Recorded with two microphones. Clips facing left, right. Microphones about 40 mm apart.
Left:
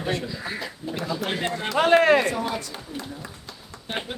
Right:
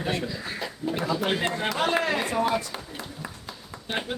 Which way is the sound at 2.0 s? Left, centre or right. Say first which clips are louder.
Left 8 dB; left.